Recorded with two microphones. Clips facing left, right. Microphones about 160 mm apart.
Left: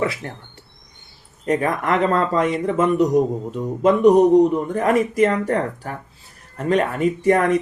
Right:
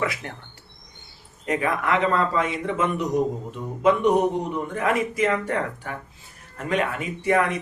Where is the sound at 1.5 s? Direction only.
40° left (ahead or behind).